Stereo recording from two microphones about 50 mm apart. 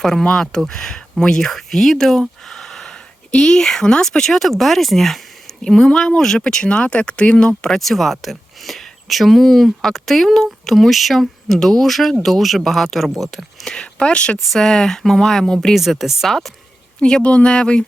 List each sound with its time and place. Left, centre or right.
0.0 s speech: centre
7.7 s speech: centre
13.7 s speech: centre
15.7 s speech: centre
17.0 s speech: centre